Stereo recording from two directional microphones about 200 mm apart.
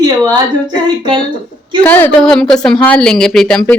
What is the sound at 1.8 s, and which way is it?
Speech, 10° left (ahead or behind).